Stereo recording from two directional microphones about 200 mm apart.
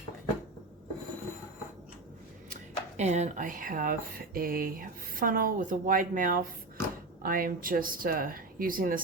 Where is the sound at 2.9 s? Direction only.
35° right (ahead or behind).